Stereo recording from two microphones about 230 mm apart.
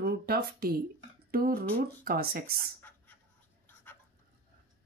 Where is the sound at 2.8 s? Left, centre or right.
Centre.